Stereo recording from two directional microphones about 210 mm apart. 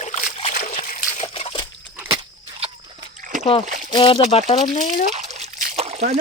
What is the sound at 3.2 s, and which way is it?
Splash, 40° right (ahead or behind).